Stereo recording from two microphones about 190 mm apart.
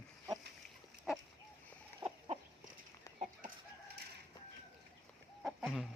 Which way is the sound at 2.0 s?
25° right (ahead or behind).